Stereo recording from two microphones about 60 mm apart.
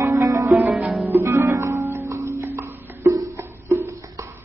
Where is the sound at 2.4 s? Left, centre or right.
Right.